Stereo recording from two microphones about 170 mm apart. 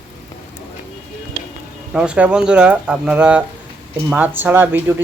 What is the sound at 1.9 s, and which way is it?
Speech, 5° right (ahead or behind).